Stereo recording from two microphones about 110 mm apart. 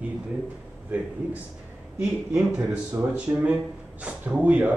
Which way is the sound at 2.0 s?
10° right (ahead or behind).